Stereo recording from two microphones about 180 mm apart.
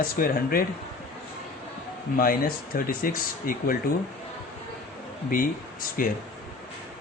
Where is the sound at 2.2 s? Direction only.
55° left (ahead or behind).